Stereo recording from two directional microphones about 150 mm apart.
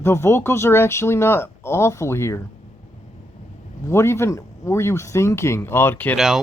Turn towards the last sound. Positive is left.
turn(degrees=10)  # may be behind; listen again after turning